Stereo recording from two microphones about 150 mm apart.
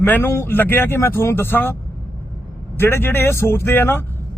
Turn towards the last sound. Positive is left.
turn(degrees=15)  # may be behind; listen again after turning